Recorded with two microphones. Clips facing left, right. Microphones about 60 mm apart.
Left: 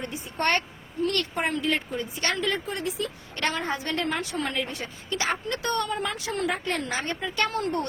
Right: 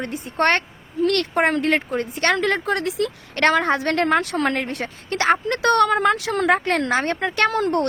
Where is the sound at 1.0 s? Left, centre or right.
Right.